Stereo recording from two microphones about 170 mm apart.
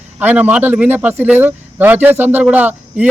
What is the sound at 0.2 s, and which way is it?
Speech, 10° right (ahead or behind).